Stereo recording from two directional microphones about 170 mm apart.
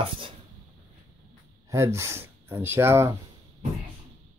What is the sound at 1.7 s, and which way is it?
Speech, 15° right (ahead or behind).